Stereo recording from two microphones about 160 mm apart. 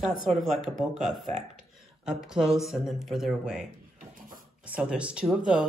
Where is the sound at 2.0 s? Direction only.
5° right (ahead or behind).